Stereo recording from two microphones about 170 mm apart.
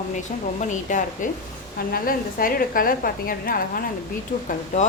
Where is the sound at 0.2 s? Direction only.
45° left (ahead or behind).